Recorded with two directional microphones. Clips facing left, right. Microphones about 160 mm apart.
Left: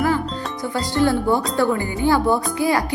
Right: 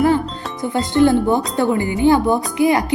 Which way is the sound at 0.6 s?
20° right (ahead or behind).